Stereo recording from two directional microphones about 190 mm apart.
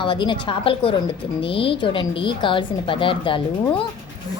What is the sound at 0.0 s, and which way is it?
A woman's voice, 25° left (ahead or behind).